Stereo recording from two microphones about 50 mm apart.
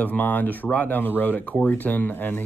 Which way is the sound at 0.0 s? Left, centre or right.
Left.